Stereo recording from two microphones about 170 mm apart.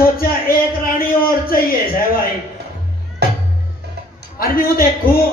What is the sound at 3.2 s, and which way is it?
Music, 75° right (ahead or behind).